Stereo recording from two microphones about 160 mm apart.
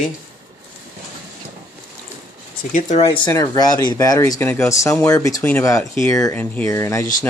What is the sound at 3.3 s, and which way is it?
Speech, 20° left (ahead or behind).